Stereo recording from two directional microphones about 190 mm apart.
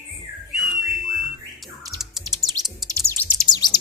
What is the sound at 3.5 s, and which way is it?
Chirp, 20° left (ahead or behind).